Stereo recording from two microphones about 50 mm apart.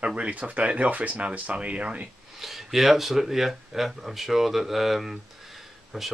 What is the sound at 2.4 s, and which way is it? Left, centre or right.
Speech, centre.